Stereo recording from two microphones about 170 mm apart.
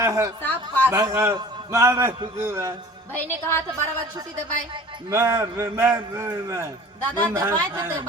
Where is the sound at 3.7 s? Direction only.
20° right (ahead or behind).